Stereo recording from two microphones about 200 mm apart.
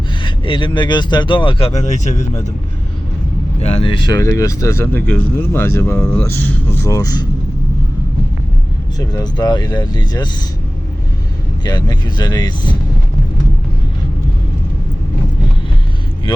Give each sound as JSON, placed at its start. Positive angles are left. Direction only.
{"t": 0.2, "sound": "speech", "side_deg": 25}
{"t": 3.6, "sound": "speech", "side_deg": 30}
{"t": 9.0, "sound": "speech", "side_deg": 20}
{"t": 11.6, "sound": "speech", "side_deg": 20}